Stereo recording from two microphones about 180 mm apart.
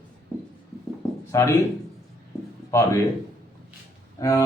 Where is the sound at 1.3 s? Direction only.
15° left (ahead or behind).